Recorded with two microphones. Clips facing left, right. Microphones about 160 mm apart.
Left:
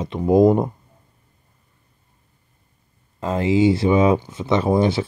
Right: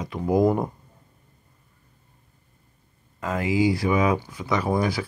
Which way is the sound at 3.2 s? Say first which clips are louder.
Left 5 dB; 25° left (ahead or behind).